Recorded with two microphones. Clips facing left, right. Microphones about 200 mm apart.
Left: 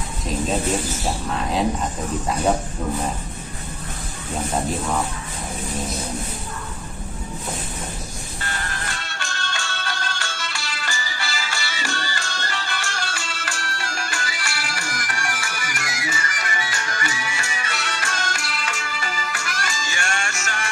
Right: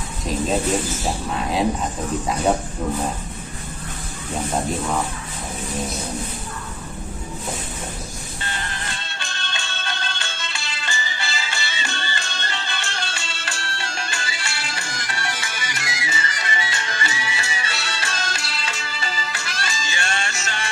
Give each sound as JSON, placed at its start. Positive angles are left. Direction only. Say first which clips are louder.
{"t": 1.3, "sound": "speech", "louder": "right 1 dB", "side_deg": 0}
{"t": 8.4, "sound": "music", "louder": "left 1 dB", "side_deg": -25}